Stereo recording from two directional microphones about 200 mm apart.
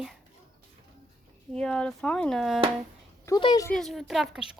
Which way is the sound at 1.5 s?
5° left (ahead or behind).